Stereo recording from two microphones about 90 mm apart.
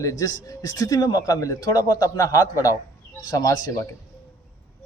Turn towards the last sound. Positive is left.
turn(degrees=40)  # may be behind; listen again after turning